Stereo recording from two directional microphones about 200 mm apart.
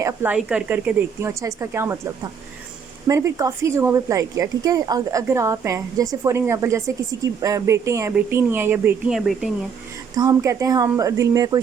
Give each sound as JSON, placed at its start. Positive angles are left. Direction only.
{"t": 0.0, "sound": "speech", "side_deg": -10}
{"t": 10.2, "sound": "speech", "side_deg": -15}